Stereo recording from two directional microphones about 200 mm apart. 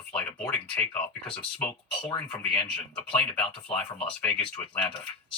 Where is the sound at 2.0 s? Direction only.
25° left (ahead or behind).